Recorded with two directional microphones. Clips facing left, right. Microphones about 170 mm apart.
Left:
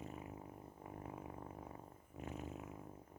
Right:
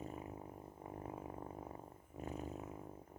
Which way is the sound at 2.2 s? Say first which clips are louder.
Right 3 dB; 35° right (ahead or behind).